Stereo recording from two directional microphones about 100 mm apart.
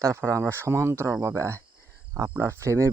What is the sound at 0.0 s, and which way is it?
Speech, 30° right (ahead or behind).